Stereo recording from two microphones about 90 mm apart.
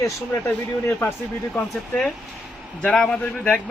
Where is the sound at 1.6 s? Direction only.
10° left (ahead or behind).